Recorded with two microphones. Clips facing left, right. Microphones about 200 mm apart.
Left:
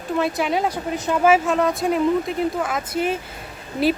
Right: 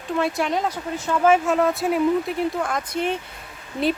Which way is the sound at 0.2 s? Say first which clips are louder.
Left 1 dB; centre (ahead or behind).